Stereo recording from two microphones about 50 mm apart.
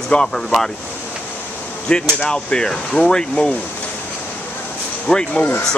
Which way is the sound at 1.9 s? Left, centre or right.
Centre.